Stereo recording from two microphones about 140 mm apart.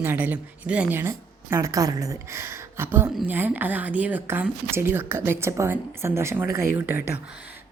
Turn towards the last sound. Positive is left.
turn(degrees=-15)  # may be behind; listen again after turning